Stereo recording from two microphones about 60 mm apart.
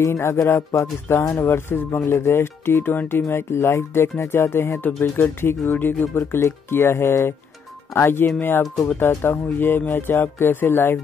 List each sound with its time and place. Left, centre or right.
0.0 s speech: left
1.4 s speech: left